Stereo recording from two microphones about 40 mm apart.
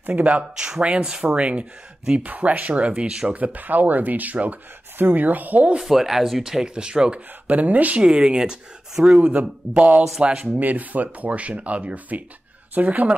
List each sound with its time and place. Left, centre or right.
0.0 s speech: right
0.4 s speech: centre; by 2.9 s right
2.9 s speech: right
3.3 s speech: right
5.8 s speech: centre
6.6 s speech: right
7.2 s speech: right
8.0 s speech: right
9.2 s speech: right
10.3 s speech: centre
10.6 s speech: right